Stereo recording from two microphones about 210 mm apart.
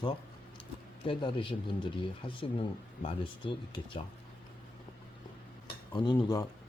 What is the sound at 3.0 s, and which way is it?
Speech, 25° left (ahead or behind).